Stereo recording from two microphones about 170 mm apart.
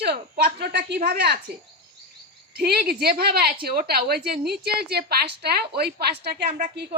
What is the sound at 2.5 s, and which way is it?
A woman's voice, 65° right (ahead or behind).